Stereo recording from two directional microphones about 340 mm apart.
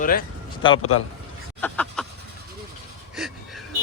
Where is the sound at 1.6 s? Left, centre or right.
Centre.